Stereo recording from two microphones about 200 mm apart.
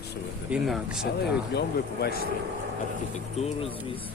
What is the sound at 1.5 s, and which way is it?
Speech, 50° left (ahead or behind).